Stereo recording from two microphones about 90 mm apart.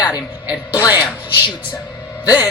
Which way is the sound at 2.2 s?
50° left (ahead or behind).